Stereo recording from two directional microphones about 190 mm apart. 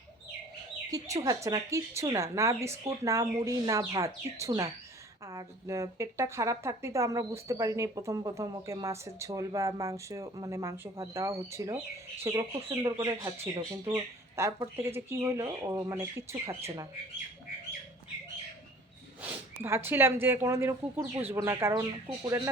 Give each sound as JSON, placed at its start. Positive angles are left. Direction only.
{"t": 0.9, "sound": "speech", "side_deg": -20}
{"t": 13.1, "sound": "speech", "side_deg": -30}
{"t": 13.4, "sound": "speech", "side_deg": -15}
{"t": 19.2, "sound": "speech", "side_deg": -10}